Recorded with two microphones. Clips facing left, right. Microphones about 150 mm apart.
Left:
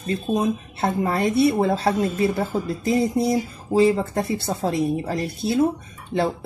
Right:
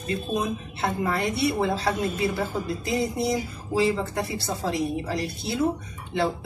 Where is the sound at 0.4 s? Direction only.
45° left (ahead or behind).